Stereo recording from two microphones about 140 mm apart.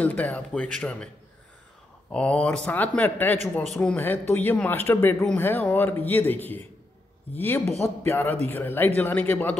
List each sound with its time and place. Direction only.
0.0 s speech: 10° left (ahead or behind)
2.1 s speech: 10° left (ahead or behind)
7.6 s a man's voice: 45° left (ahead or behind)
8.0 s speech: 15° left (ahead or behind)